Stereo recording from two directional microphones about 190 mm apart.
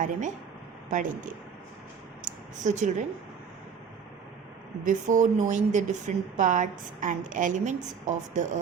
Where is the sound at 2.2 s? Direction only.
40° right (ahead or behind).